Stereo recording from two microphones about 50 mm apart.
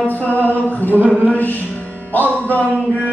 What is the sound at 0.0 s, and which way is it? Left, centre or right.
Music, left.